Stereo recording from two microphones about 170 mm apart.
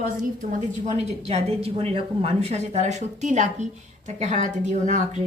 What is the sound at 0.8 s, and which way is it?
A woman's voice, 40° right (ahead or behind).